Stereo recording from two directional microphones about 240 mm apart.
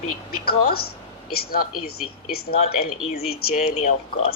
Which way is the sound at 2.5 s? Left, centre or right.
Left.